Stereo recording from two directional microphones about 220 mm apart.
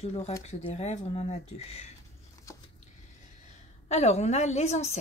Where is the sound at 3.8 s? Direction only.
30° left (ahead or behind).